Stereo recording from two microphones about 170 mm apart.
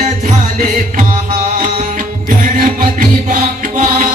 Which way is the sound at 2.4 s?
50° right (ahead or behind).